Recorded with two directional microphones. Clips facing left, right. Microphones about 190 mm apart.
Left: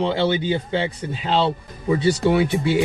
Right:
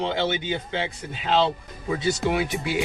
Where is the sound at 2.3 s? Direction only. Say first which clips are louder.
Left 8 dB; 30° left (ahead or behind).